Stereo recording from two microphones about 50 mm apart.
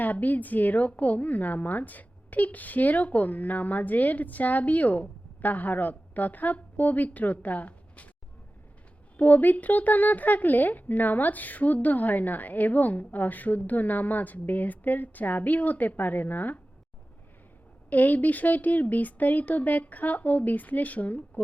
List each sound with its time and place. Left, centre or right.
0.0 s a woman's voice: left
9.1 s a woman's voice: left
17.8 s a woman's voice: left